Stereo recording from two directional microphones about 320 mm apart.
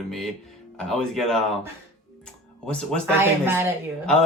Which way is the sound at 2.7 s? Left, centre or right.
Centre.